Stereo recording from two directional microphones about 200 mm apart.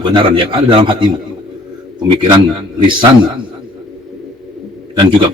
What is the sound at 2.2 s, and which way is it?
Speech, 25° right (ahead or behind).